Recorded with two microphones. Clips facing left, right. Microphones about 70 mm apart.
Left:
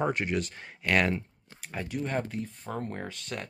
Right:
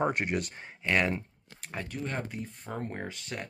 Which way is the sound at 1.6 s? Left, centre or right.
Centre.